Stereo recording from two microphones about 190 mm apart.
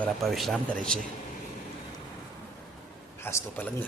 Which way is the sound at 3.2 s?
15° left (ahead or behind).